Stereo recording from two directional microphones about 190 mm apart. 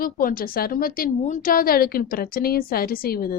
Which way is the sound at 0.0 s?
50° left (ahead or behind).